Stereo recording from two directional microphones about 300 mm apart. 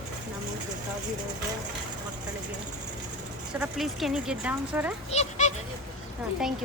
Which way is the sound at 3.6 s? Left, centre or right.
Centre.